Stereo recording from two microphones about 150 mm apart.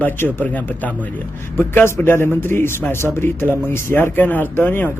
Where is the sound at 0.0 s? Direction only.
15° left (ahead or behind).